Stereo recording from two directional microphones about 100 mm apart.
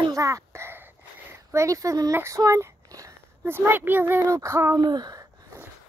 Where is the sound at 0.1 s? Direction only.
35° right (ahead or behind).